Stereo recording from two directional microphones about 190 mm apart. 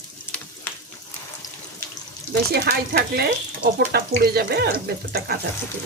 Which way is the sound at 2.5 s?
60° right (ahead or behind).